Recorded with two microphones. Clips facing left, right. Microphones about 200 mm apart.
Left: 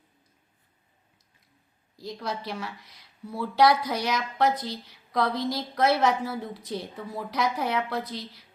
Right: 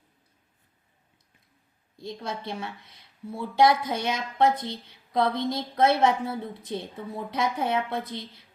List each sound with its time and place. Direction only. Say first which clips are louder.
2.0 s speech: left 1 dB; 25° right (ahead or behind)